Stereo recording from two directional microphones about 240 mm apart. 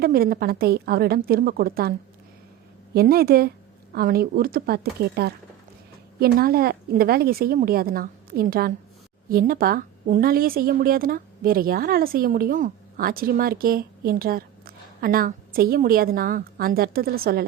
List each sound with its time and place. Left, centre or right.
0.0 s a woman's voice: right
2.9 s a woman's voice: right